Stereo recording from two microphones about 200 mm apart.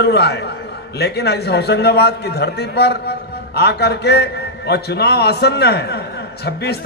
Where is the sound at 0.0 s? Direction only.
55° left (ahead or behind).